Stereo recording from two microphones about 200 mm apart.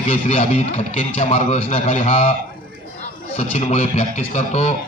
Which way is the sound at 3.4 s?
35° left (ahead or behind).